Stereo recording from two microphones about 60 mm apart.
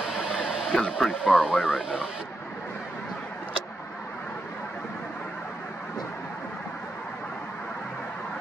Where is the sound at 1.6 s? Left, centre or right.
Centre.